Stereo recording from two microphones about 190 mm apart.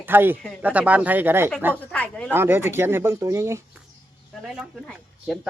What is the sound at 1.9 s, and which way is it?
Speech, 5° left (ahead or behind).